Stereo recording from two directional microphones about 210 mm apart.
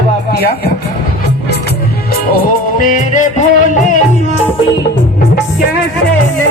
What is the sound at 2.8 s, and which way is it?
Music, 35° left (ahead or behind).